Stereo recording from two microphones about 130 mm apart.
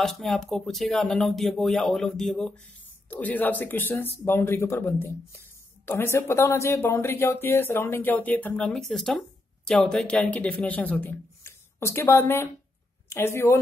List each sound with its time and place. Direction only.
0.0 s speech: centre (ahead or behind); by 13.6 s 20° left (ahead or behind)